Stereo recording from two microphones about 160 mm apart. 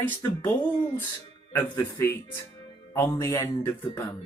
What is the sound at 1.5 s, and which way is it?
Speech, 15° left (ahead or behind).